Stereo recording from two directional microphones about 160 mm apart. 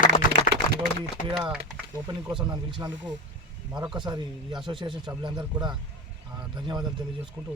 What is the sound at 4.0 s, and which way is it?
Speech, 30° right (ahead or behind).